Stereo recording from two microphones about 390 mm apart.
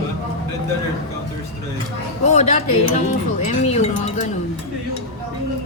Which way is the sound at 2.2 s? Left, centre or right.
Centre.